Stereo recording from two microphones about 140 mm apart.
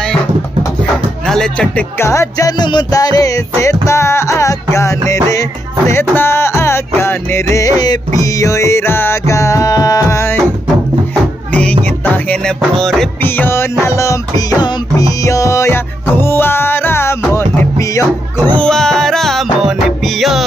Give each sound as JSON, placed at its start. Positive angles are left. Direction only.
{"t": 1.2, "sound": "speech", "side_deg": 5}
{"t": 2.0, "sound": "music", "side_deg": 20}
{"t": 12.0, "sound": "music", "side_deg": 5}
{"t": 13.2, "sound": "music", "side_deg": 15}